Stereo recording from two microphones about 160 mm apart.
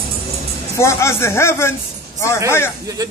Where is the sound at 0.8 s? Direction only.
15° left (ahead or behind).